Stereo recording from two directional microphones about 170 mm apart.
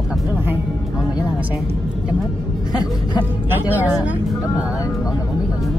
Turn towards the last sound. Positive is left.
turn(degrees=-10)  # may be behind; listen again after turning